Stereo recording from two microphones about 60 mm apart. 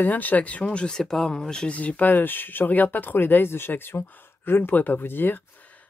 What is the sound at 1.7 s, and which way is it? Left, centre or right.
Speech, left.